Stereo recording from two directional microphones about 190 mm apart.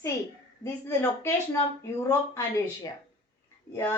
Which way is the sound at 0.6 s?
15° left (ahead or behind).